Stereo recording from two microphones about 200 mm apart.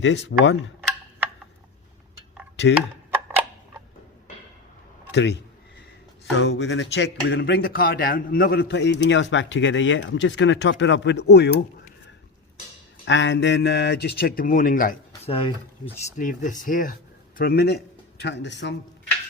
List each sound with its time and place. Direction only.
0.0 s speech: 65° left (ahead or behind)
5.1 s speech: 60° left (ahead or behind)
13.1 s a man's voice: 65° left (ahead or behind); by 14.9 s 45° left (ahead or behind)
15.3 s speech: 25° left (ahead or behind)
16.1 s a man's voice: 40° left (ahead or behind); by 18.7 s 60° left (ahead or behind)